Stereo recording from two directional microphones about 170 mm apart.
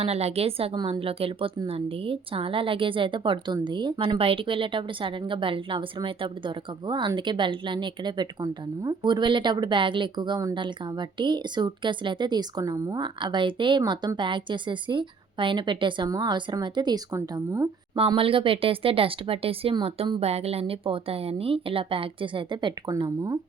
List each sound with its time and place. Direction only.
0.0 s a woman's voice: 40° right (ahead or behind); by 17.7 s 15° right (ahead or behind)
17.9 s a woman's voice: 30° right (ahead or behind)